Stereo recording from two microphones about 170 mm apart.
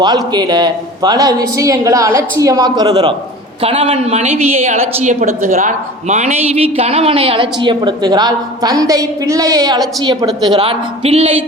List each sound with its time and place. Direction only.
0.0 s a woman's voice: 25° right (ahead or behind)
3.6 s a woman's voice: 35° right (ahead or behind)